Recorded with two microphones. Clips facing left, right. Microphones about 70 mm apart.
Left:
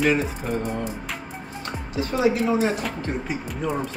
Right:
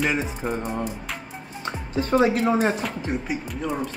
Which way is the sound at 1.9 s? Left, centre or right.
Right.